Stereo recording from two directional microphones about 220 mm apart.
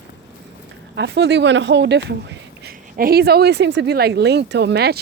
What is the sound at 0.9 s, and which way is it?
Speech, 50° right (ahead or behind).